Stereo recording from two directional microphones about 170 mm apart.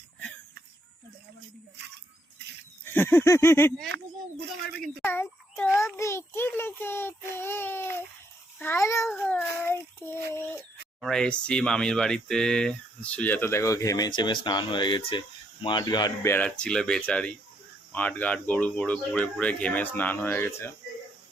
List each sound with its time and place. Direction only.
2.8 s speech: 10° left (ahead or behind)
3.8 s a sound: 85° right
5.0 s a sound: 10° left (ahead or behind)
5.7 s speech: 15° left (ahead or behind)
9.0 s speech: 5° left (ahead or behind); by 16.3 s 25° left (ahead or behind)
16.3 s speech: 5° left (ahead or behind)